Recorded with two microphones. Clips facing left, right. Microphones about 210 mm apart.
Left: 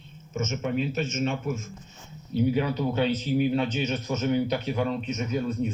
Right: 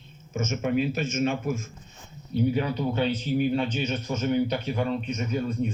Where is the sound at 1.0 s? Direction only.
55° right (ahead or behind).